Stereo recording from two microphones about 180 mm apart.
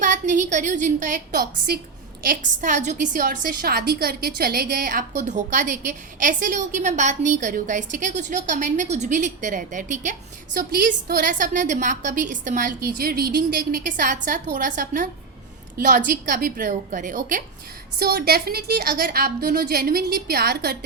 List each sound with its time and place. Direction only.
0.0 s a woman's voice: 45° right (ahead or behind)
18.0 s a woman's voice: 60° right (ahead or behind)